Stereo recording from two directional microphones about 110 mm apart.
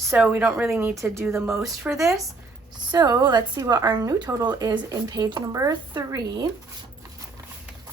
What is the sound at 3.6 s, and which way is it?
Speech, 30° right (ahead or behind).